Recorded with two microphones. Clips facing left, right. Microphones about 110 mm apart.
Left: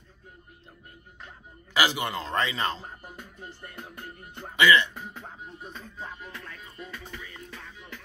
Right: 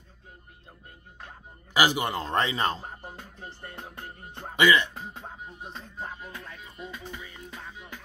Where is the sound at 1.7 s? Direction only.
15° right (ahead or behind).